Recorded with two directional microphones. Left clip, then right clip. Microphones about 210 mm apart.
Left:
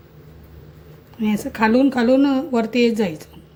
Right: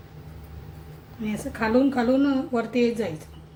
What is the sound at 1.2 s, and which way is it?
A woman's voice, 40° left (ahead or behind).